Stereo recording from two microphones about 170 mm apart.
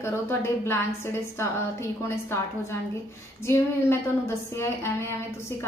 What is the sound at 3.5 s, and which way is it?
A woman's voice, 15° left (ahead or behind).